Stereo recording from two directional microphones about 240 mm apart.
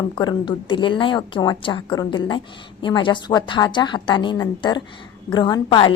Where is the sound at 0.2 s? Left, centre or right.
Centre.